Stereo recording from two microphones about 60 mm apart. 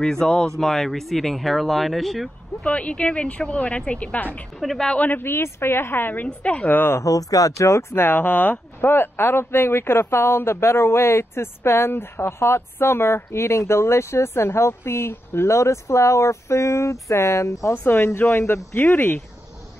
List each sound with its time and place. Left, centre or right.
0.0 s speech: centre
2.6 s speech: left
4.6 s speech: centre
4.9 s speech: left
5.2 s speech: left
6.2 s speech: left
7.0 s speech: left
7.9 s speech: left
17.8 s speech: left